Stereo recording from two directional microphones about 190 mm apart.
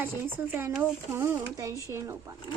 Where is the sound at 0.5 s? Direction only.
10° right (ahead or behind).